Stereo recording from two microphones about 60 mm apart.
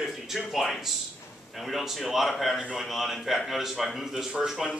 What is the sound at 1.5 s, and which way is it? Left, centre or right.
A man's voice, centre.